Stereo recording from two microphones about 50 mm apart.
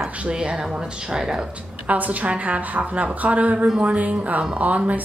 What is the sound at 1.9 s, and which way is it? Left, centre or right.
A woman's voice, right.